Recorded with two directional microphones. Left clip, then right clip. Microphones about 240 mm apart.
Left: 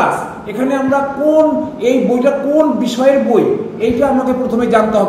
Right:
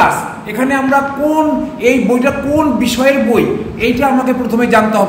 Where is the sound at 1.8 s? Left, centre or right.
Centre.